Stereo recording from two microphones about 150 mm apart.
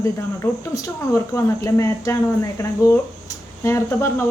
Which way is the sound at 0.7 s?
20° left (ahead or behind).